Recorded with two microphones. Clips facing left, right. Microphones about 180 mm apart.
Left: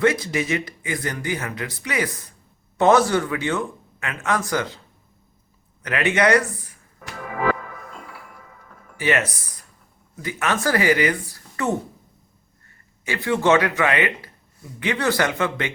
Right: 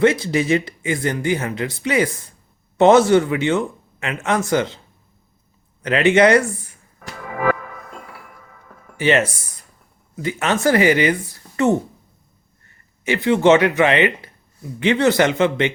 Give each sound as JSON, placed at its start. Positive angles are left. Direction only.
{"t": 0.0, "sound": "speech", "side_deg": -25}
{"t": 5.8, "sound": "speech", "side_deg": -25}
{"t": 9.0, "sound": "speech", "side_deg": -25}
{"t": 13.1, "sound": "speech", "side_deg": -20}